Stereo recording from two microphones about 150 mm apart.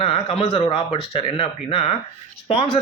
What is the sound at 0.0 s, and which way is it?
Speech, 40° left (ahead or behind).